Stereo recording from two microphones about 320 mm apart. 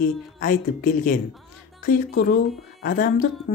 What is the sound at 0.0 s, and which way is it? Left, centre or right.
Speech, left.